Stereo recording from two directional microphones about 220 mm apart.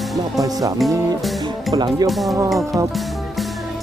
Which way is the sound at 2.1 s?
Centre (ahead or behind).